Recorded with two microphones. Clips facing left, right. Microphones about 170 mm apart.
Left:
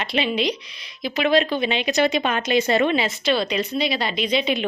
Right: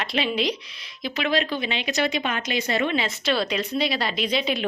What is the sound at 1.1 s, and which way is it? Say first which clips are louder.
Speech: left 5 dB; 20° left (ahead or behind).